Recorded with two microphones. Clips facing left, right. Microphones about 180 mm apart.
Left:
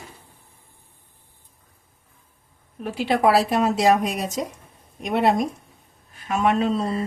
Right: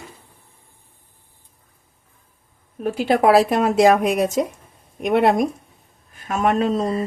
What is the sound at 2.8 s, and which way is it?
Speech, 45° right (ahead or behind).